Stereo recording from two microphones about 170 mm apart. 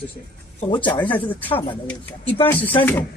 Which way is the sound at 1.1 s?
10° left (ahead or behind).